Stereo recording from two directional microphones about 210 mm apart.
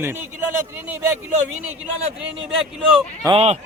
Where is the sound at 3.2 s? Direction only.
25° right (ahead or behind).